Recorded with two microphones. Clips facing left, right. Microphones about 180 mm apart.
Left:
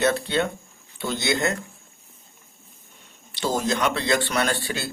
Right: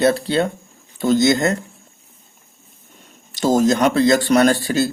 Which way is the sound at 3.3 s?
45° right (ahead or behind).